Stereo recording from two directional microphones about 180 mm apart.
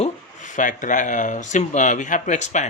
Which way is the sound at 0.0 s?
45° left (ahead or behind).